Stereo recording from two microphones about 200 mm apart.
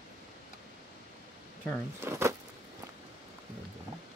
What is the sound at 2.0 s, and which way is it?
Speech, 15° right (ahead or behind).